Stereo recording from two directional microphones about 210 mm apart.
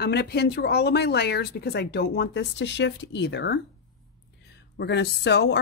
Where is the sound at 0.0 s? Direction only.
50° left (ahead or behind).